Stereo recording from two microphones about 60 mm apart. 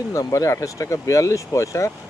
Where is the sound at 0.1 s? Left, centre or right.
Left.